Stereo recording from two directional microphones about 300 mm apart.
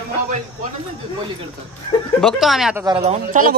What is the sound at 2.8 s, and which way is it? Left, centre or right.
Speech, centre.